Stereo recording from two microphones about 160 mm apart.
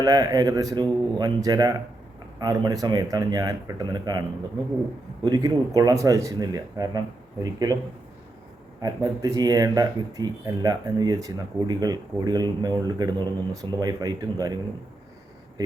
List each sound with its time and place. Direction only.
0.0 s speech: 25° right (ahead or behind)
5.2 s speech: 25° right (ahead or behind)
8.8 s speech: 25° right (ahead or behind)